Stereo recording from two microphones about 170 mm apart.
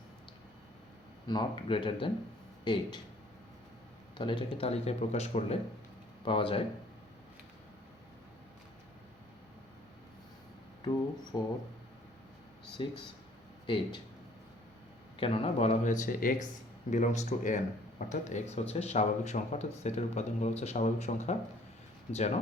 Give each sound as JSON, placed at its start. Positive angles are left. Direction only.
{"t": 1.3, "sound": "speech", "side_deg": 25}
{"t": 4.2, "sound": "speech", "side_deg": 30}
{"t": 10.8, "sound": "speech", "side_deg": 25}
{"t": 12.8, "sound": "speech", "side_deg": 30}
{"t": 15.2, "sound": "speech", "side_deg": 35}